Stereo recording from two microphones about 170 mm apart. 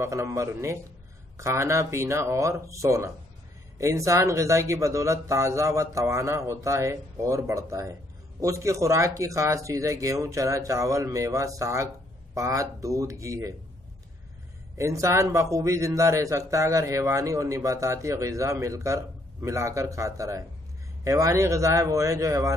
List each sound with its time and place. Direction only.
0.0 s a man's voice: 15° right (ahead or behind)
14.8 s a man's voice: 20° right (ahead or behind)